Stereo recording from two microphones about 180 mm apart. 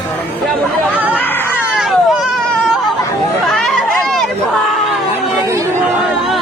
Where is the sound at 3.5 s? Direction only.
Centre (ahead or behind).